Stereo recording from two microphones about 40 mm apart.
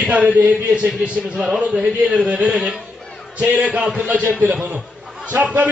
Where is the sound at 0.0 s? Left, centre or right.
Right.